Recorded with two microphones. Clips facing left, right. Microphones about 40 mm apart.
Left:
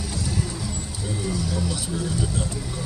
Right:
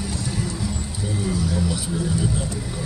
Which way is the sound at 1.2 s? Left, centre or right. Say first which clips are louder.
Right 3 dB; centre.